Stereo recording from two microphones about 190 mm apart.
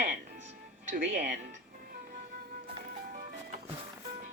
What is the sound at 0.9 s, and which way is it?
Speech, 55° right (ahead or behind).